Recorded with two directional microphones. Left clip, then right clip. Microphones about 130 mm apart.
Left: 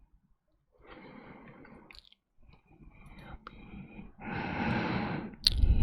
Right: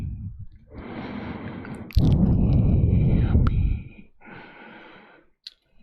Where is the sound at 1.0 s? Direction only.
85° right.